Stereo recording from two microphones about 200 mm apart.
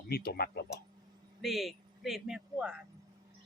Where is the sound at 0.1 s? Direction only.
50° left (ahead or behind).